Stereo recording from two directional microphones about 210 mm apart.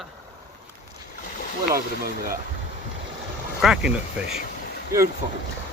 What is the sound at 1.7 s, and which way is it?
Speech, 45° right (ahead or behind).